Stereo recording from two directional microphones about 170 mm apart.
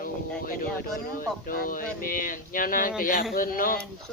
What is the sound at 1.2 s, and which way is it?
Speech, 55° left (ahead or behind).